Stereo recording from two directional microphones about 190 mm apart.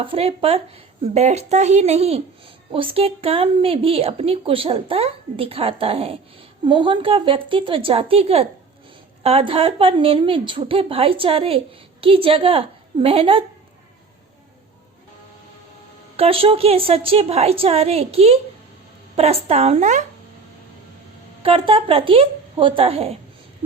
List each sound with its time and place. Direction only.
0.0 s a woman's voice: 30° right (ahead or behind)
16.1 s a woman's voice: 30° right (ahead or behind)
21.4 s a woman's voice: 30° right (ahead or behind)